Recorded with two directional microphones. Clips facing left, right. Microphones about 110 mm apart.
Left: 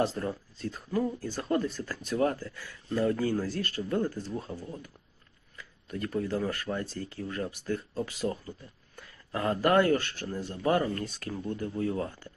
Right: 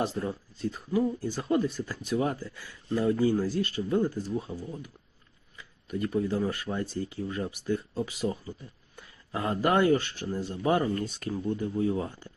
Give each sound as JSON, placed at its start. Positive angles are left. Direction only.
{"t": 0.0, "sound": "speech", "side_deg": -15}
{"t": 5.9, "sound": "speech", "side_deg": -15}